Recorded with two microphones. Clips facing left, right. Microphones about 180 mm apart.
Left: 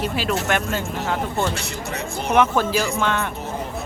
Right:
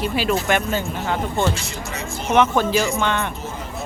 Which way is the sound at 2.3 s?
5° left (ahead or behind).